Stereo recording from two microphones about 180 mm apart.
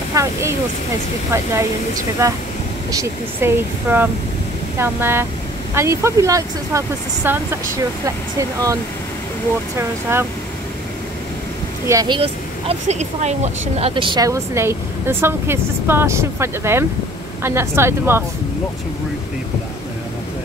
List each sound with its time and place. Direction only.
0.1 s speech: 15° right (ahead or behind)
9.8 s speech: 15° right (ahead or behind)
11.9 s speech: 20° right (ahead or behind)
12.2 s speech: 35° right (ahead or behind); by 18.2 s 15° right (ahead or behind)